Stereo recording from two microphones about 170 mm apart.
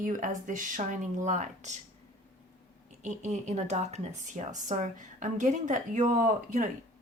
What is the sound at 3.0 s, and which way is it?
A woman's voice, 45° right (ahead or behind).